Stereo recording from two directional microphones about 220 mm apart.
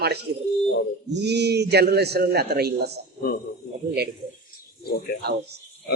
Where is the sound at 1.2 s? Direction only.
50° right (ahead or behind).